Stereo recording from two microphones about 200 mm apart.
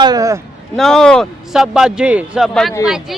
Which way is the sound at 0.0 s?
20° right (ahead or behind).